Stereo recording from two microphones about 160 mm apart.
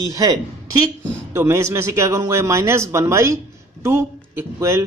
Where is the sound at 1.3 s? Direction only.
15° right (ahead or behind).